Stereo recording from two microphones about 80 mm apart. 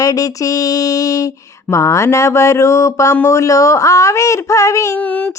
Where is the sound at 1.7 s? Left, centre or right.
Left.